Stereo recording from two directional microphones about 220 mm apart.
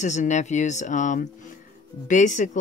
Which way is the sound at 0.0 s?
30° left (ahead or behind).